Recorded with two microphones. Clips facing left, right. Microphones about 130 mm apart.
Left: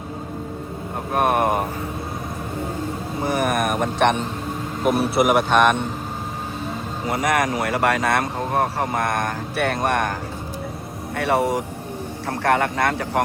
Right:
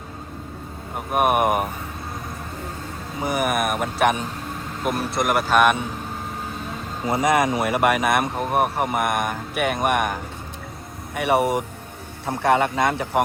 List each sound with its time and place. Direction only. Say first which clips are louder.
1.1 s speech: even; 15° right (ahead or behind)
3.2 s a man's voice: left 1 dB; 10° right (ahead or behind)
7.1 s speech: right 2 dB; 20° right (ahead or behind)
11.2 s speech: even; 20° right (ahead or behind)